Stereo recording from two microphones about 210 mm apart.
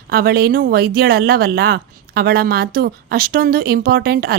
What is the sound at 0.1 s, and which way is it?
A woman's voice, 45° right (ahead or behind).